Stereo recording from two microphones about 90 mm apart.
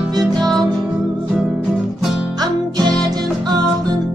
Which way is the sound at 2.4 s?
50° right (ahead or behind).